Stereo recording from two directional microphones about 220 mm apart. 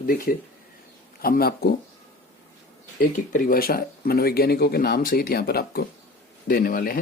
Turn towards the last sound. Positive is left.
turn(degrees=40)  # may be behind; listen again after turning